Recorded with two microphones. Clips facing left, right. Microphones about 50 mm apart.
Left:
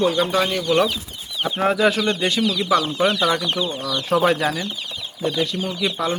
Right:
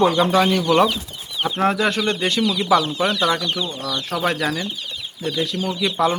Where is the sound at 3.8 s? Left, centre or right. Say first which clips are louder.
Left 5 dB; centre.